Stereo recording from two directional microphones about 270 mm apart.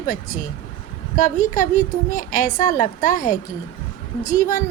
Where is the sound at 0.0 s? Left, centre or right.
Left.